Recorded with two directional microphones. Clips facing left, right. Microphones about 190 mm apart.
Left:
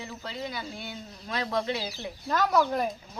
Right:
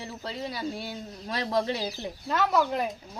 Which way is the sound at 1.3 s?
35° right (ahead or behind).